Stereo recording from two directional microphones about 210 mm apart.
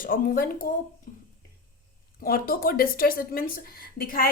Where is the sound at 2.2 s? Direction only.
45° left (ahead or behind).